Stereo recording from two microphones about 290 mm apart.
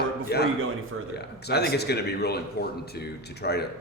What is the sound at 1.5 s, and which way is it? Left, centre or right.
Speech, left.